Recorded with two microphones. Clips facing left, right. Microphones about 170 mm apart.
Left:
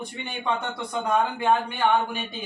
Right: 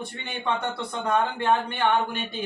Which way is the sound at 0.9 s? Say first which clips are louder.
Left 2 dB; 10° left (ahead or behind).